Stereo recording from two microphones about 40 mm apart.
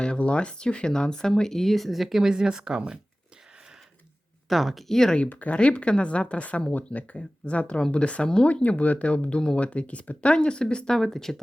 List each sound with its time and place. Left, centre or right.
0.0 s speech: left; by 3.0 s right
4.4 s speech: centre
5.3 s speech: left
5.5 s speech: left
10.3 s speech: left
10.9 s speech: centre